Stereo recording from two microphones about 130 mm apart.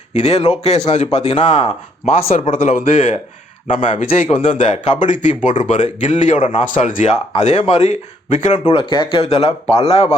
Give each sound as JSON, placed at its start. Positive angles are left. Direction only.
{"t": 0.1, "sound": "speech", "side_deg": 60}
{"t": 2.5, "sound": "speech", "side_deg": 90}
{"t": 3.9, "sound": "speech", "side_deg": 50}
{"t": 4.7, "sound": "speech", "side_deg": 65}
{"t": 6.6, "sound": "speech", "side_deg": 85}
{"t": 8.6, "sound": "speech", "side_deg": 40}
{"t": 9.2, "sound": "speech", "side_deg": 50}